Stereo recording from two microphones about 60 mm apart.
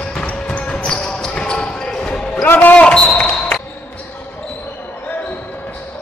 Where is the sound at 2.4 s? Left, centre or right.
Left.